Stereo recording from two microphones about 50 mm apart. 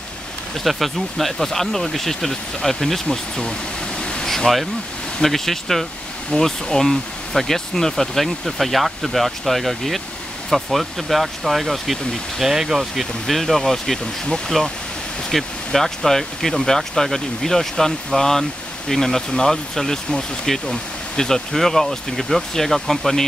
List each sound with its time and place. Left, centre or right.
0.7 s speech: centre
4.0 s vehicle: centre
4.3 s speech: centre